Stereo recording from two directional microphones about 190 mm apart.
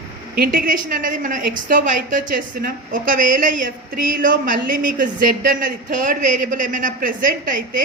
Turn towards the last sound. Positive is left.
turn(degrees=-45)  # may be behind; listen again after turning